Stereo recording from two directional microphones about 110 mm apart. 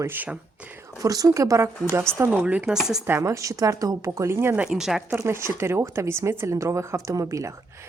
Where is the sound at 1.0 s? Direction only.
35° right (ahead or behind).